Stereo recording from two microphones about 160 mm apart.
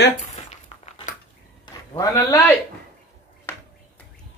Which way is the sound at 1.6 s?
25° left (ahead or behind).